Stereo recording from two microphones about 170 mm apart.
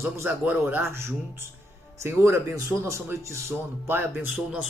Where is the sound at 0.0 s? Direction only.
15° right (ahead or behind).